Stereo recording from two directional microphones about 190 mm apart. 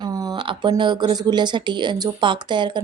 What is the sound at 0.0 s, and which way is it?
Speech, 20° right (ahead or behind).